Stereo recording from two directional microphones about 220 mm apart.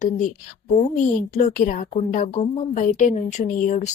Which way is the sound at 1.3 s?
35° left (ahead or behind).